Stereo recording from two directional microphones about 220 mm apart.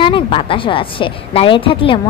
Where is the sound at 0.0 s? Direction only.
25° left (ahead or behind).